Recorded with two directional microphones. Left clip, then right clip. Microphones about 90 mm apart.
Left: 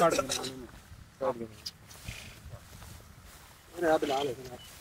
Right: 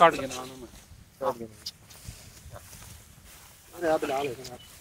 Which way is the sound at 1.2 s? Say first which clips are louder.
Right 2 dB; centre (ahead or behind).